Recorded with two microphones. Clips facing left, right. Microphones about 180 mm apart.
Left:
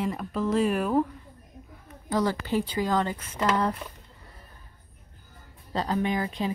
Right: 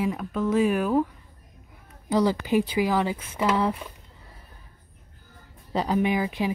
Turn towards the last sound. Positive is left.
turn(degrees=-10)  # may be behind; listen again after turning